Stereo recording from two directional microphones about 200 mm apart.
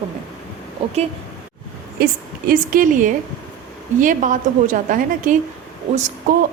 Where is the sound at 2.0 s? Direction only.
50° right (ahead or behind).